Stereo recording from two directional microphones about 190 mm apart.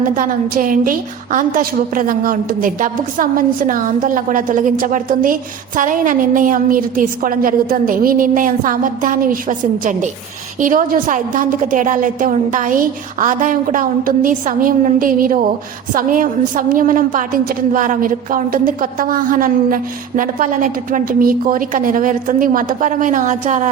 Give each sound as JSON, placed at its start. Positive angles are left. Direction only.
{"t": 0.2, "sound": "a woman's voice", "side_deg": -45}